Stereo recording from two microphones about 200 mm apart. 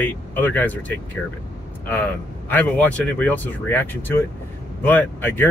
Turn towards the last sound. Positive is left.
turn(degrees=10)  # may be behind; listen again after turning